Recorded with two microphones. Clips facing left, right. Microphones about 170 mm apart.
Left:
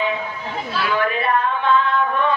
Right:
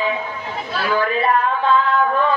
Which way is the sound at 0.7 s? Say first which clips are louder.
Right 2 dB; 35° right (ahead or behind).